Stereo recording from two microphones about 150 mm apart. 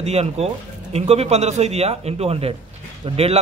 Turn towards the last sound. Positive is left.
turn(degrees=-35)  # may be behind; listen again after turning